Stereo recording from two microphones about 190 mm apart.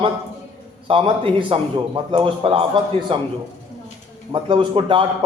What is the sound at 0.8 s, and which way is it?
A man's voice, 25° right (ahead or behind).